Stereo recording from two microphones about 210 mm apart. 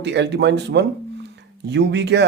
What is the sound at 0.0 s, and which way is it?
Speech, 55° right (ahead or behind).